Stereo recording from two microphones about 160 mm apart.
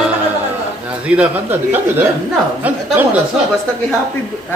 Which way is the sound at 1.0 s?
10° right (ahead or behind).